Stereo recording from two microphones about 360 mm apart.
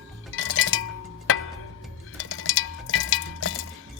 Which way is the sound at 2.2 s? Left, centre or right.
Left.